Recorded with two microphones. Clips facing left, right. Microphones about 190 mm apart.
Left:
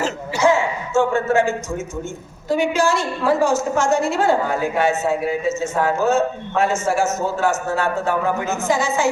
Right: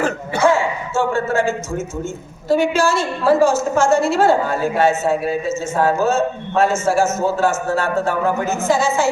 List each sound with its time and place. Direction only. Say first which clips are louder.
0.0 s a sound: right 2 dB; 55° right (ahead or behind)
0.9 s a woman's voice: left 2 dB; 15° left (ahead or behind)
6.1 s a woman's voice: even; 15° left (ahead or behind)